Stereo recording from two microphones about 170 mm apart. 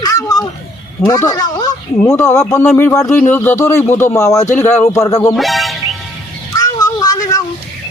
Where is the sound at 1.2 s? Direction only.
20° left (ahead or behind).